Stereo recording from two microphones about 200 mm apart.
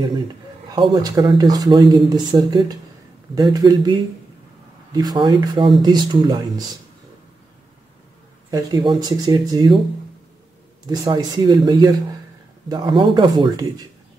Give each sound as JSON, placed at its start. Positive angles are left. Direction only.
{"t": 0.7, "sound": "speech", "side_deg": -25}
{"t": 8.5, "sound": "speech", "side_deg": -20}
{"t": 10.9, "sound": "speech", "side_deg": -20}